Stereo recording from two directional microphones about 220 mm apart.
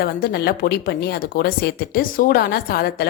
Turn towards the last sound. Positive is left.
turn(degrees=45)  # may be behind; listen again after turning